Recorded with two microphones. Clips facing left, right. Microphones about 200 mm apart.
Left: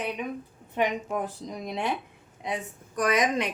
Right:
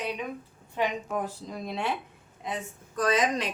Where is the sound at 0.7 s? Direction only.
20° left (ahead or behind).